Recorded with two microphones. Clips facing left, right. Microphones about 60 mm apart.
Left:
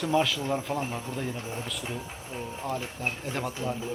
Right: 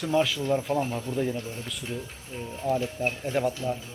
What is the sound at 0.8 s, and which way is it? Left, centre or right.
Speech, centre.